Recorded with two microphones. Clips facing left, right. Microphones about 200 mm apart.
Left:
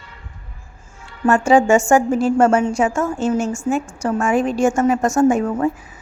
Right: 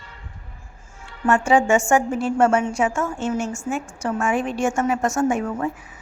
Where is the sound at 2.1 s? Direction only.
90° left.